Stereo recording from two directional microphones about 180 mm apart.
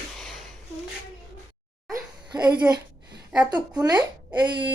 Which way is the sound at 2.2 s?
25° right (ahead or behind).